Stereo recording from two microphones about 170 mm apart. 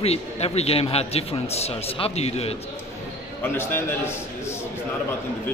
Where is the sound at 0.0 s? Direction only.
40° left (ahead or behind).